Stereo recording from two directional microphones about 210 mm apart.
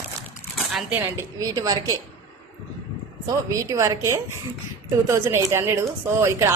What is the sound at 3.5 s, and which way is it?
Speech, 15° right (ahead or behind).